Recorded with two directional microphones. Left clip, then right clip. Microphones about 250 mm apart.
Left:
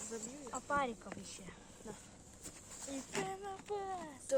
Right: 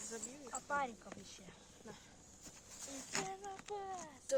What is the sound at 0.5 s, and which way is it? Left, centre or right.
Speech, left.